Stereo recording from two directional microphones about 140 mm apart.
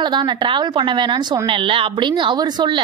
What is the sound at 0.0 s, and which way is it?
A woman's voice, 30° right (ahead or behind).